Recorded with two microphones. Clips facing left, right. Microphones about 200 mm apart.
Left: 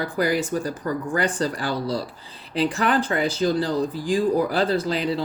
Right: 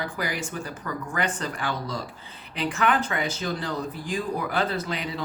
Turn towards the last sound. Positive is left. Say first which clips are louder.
# left 7 dB
turn(degrees=35)  # may be behind; listen again after turning